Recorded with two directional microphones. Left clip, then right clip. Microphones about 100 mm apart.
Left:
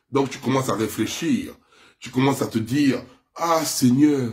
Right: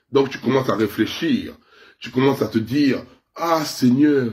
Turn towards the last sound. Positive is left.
turn(degrees=30)  # may be behind; listen again after turning